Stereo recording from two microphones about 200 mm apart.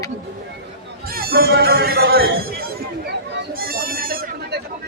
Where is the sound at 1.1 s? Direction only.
50° right (ahead or behind).